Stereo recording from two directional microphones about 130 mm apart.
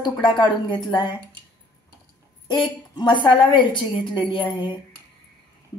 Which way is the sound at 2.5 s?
35° left (ahead or behind).